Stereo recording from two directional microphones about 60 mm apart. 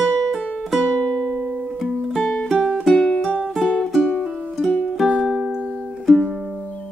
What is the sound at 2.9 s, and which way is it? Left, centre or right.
Music, centre.